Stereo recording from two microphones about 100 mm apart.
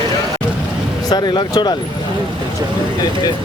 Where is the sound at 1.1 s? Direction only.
45° left (ahead or behind).